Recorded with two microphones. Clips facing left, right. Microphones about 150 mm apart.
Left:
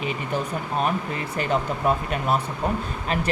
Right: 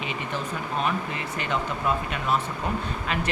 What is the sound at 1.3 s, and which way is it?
Speech, 40° left (ahead or behind).